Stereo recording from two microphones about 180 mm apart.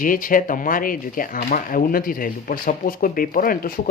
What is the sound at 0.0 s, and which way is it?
Speech, 50° left (ahead or behind).